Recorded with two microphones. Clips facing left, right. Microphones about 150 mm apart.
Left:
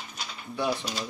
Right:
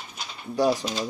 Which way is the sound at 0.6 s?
40° right (ahead or behind).